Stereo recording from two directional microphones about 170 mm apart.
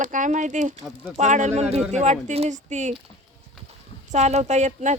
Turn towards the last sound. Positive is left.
turn(degrees=-45)  # may be behind; listen again after turning